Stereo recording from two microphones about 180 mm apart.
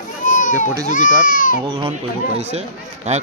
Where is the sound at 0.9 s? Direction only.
50° left (ahead or behind).